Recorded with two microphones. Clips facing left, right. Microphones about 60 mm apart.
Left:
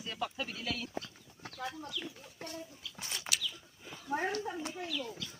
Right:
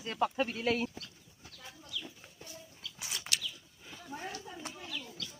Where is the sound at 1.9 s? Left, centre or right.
Left.